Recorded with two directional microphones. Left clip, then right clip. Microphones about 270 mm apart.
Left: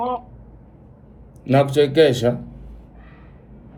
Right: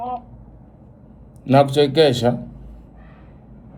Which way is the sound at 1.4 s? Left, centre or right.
Centre.